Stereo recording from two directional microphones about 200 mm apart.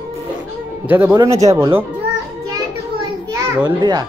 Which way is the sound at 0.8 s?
15° right (ahead or behind).